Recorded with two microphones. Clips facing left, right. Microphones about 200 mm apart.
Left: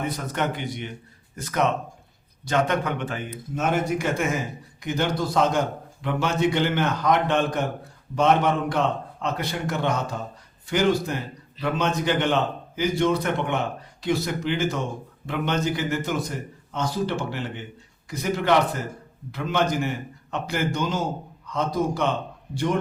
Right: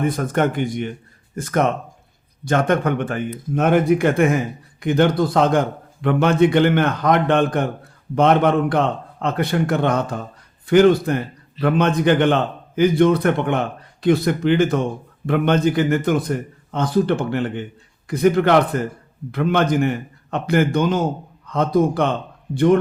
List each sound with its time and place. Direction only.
0.0 s a man's voice: 50° right (ahead or behind)